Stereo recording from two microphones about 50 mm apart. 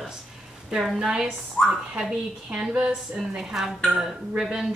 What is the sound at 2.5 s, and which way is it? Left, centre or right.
Speech, centre.